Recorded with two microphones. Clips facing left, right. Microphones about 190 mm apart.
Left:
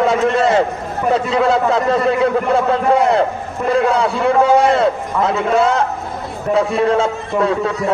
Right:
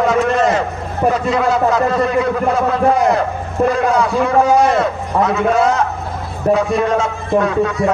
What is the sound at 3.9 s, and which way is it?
A man's voice, 30° left (ahead or behind).